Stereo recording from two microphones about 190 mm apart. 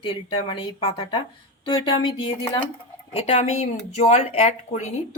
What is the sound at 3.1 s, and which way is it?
Speech, 30° left (ahead or behind).